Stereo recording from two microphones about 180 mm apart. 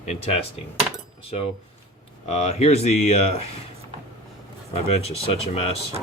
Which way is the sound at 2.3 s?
35° left (ahead or behind).